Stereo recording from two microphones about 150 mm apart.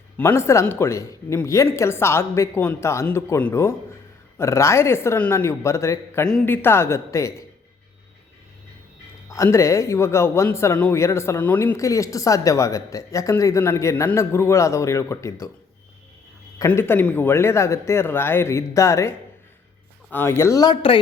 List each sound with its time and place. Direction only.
0.2 s speech: 15° left (ahead or behind)
6.2 s speech: 10° left (ahead or behind)
9.3 s speech: 20° left (ahead or behind)
16.6 s speech: 15° left (ahead or behind)